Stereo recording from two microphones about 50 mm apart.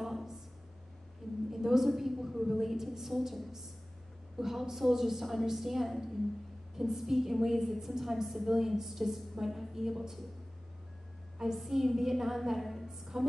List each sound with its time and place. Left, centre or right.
0.0 s a sound: centre
1.5 s a woman's voice: centre
11.3 s a woman's voice: centre